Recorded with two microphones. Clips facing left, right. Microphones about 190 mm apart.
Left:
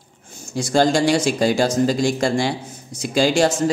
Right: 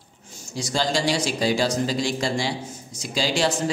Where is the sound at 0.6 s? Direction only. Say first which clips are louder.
Left 8 dB; 50° left (ahead or behind).